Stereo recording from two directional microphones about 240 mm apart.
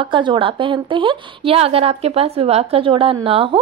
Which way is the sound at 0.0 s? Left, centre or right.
Centre.